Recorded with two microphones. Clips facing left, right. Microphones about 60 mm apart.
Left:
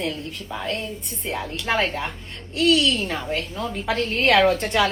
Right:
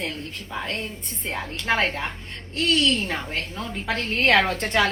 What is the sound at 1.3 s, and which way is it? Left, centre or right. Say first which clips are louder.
A woman's voice: even; right.